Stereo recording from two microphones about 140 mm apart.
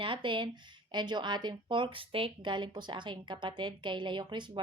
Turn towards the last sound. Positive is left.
turn(degrees=-35)  # may be behind; listen again after turning